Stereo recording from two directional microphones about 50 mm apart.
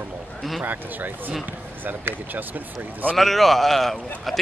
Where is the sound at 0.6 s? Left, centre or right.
Right.